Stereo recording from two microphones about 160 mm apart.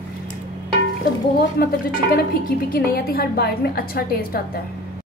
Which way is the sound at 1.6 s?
75° left (ahead or behind).